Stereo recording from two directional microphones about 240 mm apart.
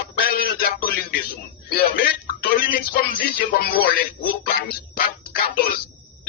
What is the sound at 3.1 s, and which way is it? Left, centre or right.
Music, left.